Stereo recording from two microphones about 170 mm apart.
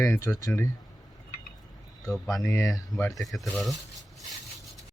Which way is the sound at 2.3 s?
15° left (ahead or behind).